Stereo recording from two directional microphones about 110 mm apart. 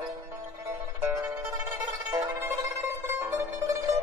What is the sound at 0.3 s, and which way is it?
Music, 25° right (ahead or behind).